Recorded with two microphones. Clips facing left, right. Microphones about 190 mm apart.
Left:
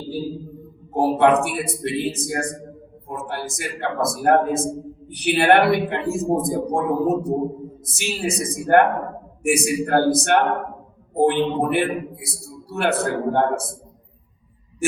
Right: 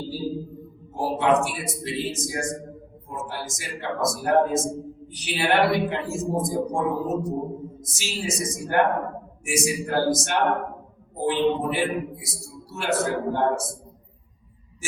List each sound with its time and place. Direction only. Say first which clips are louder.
0.9 s a man's voice: left 5 dB; 60° left (ahead or behind)